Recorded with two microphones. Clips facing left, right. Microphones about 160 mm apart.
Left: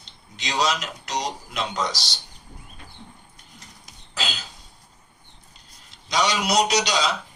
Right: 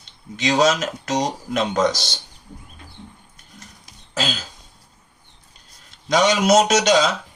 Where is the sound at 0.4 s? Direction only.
50° right (ahead or behind).